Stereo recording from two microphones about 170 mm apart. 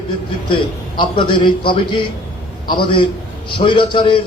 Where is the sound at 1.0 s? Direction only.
30° left (ahead or behind).